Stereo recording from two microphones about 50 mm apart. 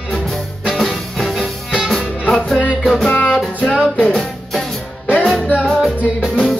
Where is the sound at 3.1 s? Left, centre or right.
Left.